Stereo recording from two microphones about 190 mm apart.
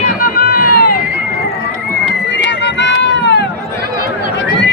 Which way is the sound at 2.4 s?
65° left (ahead or behind).